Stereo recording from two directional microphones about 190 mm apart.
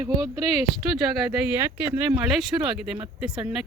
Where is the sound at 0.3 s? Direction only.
30° left (ahead or behind).